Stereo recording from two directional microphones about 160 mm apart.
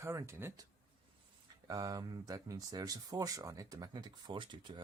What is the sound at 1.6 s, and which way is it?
Speech, 20° right (ahead or behind).